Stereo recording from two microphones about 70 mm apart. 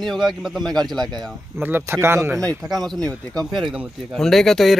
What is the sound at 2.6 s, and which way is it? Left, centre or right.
A man's voice, centre.